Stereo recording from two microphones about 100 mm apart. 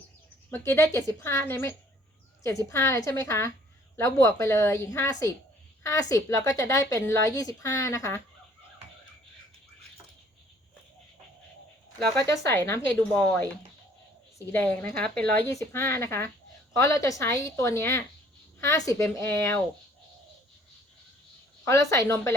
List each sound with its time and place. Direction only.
0.5 s a woman's voice: 25° left (ahead or behind)
12.1 s a woman's voice: 35° left (ahead or behind)
14.5 s speech: 20° left (ahead or behind)
15.5 s a woman's voice: 25° left (ahead or behind)
21.6 s a woman's voice: 30° left (ahead or behind)